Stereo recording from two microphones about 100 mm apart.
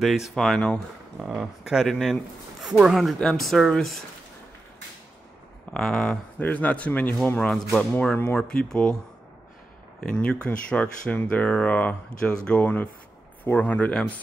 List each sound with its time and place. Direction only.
0.0 s speech: 5° right (ahead or behind)
5.7 s speech: 5° left (ahead or behind)
6.4 s speech: 15° left (ahead or behind)